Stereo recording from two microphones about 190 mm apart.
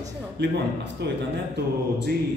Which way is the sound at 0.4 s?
65° right (ahead or behind).